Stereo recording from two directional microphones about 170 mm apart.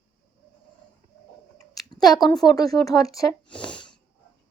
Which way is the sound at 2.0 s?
25° left (ahead or behind).